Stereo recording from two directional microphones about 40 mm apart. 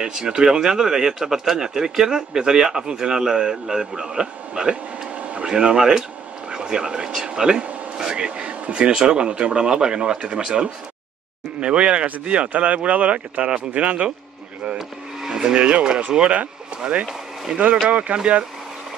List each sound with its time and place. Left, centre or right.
0.0 s speech: centre
5.1 s a sound: right
5.5 s speech: right
14.8 s vehicle: centre
15.7 s speech: right
17.5 s speech: right